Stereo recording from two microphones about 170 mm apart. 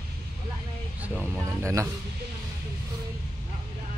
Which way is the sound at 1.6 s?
20° right (ahead or behind).